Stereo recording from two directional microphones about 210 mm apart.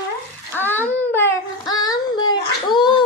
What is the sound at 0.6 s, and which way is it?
Child singing, 10° left (ahead or behind).